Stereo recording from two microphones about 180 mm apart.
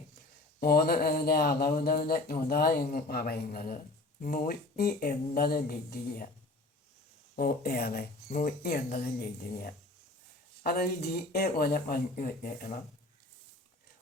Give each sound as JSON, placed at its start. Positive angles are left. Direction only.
{"t": 0.6, "sound": "speech", "side_deg": 60}
{"t": 7.3, "sound": "speech", "side_deg": 60}